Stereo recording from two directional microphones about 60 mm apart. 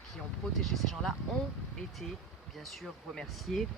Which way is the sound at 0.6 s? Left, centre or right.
Centre.